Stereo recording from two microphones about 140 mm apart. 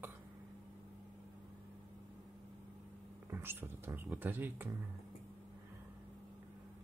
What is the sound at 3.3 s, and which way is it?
Speech, 15° right (ahead or behind).